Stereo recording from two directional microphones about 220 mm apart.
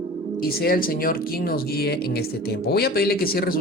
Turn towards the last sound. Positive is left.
turn(degrees=40)  # may be behind; listen again after turning